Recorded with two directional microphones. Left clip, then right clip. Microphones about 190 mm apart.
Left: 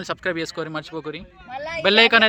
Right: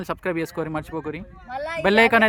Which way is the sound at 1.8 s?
30° right (ahead or behind).